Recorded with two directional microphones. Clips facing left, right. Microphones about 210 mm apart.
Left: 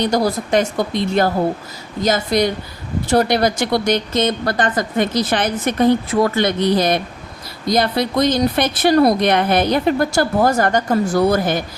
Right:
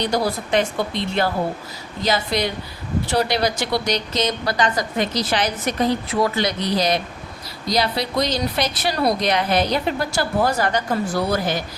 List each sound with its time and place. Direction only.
0.0 s a woman's voice: 45° left (ahead or behind)